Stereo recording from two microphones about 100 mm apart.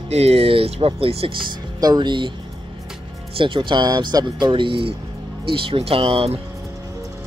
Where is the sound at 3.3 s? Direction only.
60° right (ahead or behind); by 6.4 s 75° right (ahead or behind).